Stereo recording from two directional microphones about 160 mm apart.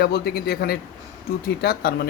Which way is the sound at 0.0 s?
85° left.